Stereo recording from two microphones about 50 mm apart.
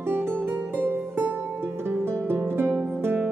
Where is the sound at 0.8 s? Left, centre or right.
Right.